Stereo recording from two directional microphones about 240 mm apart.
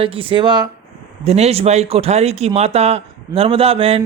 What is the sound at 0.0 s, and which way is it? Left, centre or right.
Speech, right.